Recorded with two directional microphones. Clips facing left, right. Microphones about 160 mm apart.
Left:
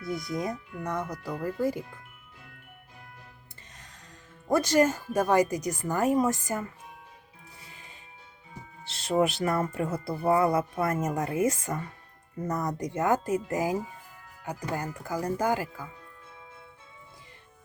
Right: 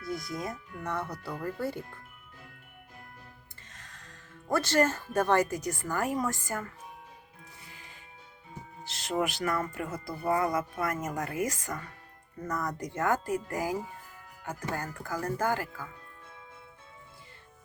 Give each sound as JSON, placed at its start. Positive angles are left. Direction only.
{"t": 0.0, "sound": "speech", "side_deg": 20}
{"t": 3.8, "sound": "music", "side_deg": 20}
{"t": 4.4, "sound": "speech", "side_deg": 15}
{"t": 9.0, "sound": "speech", "side_deg": 25}